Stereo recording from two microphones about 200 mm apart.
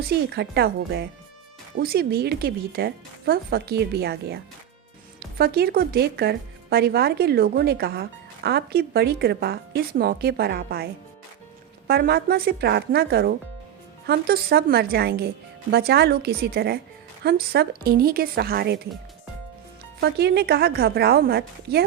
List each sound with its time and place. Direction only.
0.3 s a woman's voice: 50° right (ahead or behind)
5.4 s a woman's voice: 50° right (ahead or behind)
11.9 s a woman's voice: 50° right (ahead or behind)
20.0 s a woman's voice: 55° right (ahead or behind)